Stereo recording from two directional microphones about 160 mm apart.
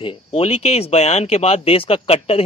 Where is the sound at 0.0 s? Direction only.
35° left (ahead or behind).